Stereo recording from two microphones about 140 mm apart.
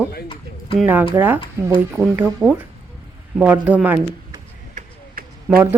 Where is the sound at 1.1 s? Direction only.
15° right (ahead or behind).